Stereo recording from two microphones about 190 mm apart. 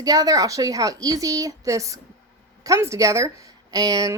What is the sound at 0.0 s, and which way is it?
A woman's voice, 20° right (ahead or behind).